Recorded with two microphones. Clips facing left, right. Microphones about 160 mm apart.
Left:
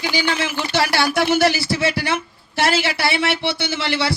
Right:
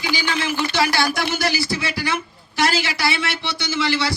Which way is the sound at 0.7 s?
65° left (ahead or behind).